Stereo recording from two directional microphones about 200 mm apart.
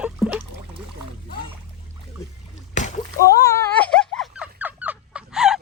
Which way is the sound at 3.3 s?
15° left (ahead or behind).